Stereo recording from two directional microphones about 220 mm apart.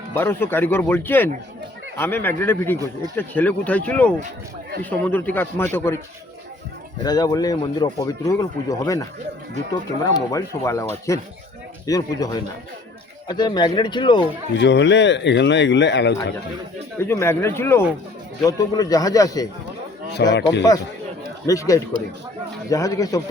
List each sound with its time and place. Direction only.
0.1 s speech: 10° left (ahead or behind)
2.7 s speech: 15° right (ahead or behind)
3.2 s speech: 5° left (ahead or behind)
7.0 s speech: 15° left (ahead or behind)
10.2 s speech: 15° left (ahead or behind)
14.5 s speech: 50° left (ahead or behind)
17.0 s speech: 10° left (ahead or behind)
20.2 s speech: 50° left (ahead or behind)
21.4 s speech: 15° left (ahead or behind)